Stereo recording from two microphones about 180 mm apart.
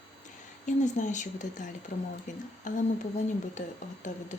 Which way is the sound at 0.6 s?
45° left (ahead or behind).